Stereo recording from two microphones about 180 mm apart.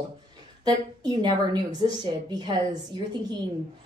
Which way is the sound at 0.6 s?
25° right (ahead or behind).